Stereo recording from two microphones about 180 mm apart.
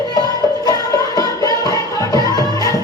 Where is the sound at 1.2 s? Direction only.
20° left (ahead or behind).